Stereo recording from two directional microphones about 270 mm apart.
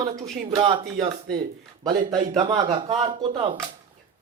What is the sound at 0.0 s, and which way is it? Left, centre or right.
Speech, centre.